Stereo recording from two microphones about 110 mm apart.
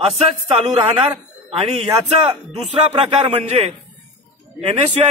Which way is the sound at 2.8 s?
75° right (ahead or behind).